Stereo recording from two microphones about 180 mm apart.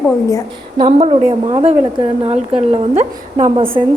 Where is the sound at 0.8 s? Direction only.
30° right (ahead or behind).